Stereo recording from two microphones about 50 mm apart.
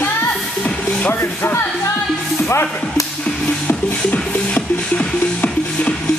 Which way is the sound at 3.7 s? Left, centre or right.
Left.